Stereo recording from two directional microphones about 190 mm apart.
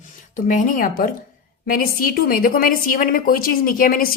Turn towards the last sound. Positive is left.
turn(degrees=50)  # may be behind; listen again after turning